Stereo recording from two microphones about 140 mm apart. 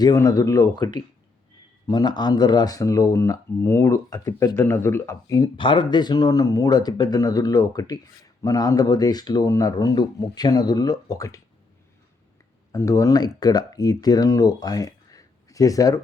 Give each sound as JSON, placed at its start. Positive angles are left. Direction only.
{"t": 0.0, "sound": "speech", "side_deg": 25}
{"t": 5.5, "sound": "speech", "side_deg": 35}
{"t": 12.7, "sound": "speech", "side_deg": 20}